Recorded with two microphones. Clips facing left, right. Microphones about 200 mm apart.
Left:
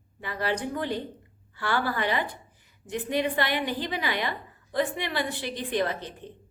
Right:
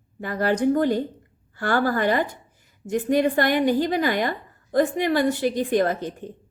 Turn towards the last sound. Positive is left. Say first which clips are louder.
# right 6 dB
turn(degrees=-45)  # may be behind; listen again after turning